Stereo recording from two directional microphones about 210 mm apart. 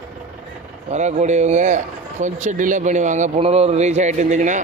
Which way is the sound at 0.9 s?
35° right (ahead or behind).